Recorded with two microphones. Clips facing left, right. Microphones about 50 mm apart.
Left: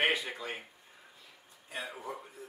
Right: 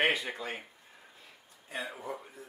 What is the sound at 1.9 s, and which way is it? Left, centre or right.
Speech, centre.